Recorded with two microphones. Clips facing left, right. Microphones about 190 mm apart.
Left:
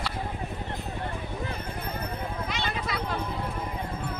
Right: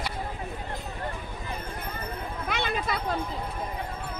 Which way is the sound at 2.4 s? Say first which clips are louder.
Right 6 dB; 55° right (ahead or behind).